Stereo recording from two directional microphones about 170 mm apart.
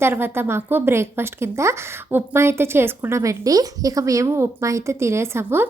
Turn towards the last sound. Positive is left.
turn(degrees=-15)  # may be behind; listen again after turning